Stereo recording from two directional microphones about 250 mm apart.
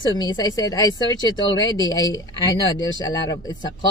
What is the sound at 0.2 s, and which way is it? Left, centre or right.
Speech, centre.